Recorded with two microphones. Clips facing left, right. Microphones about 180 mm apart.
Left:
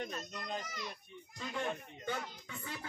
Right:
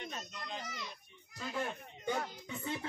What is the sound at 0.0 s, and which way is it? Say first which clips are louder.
Speech: left 3 dB; 45° left (ahead or behind).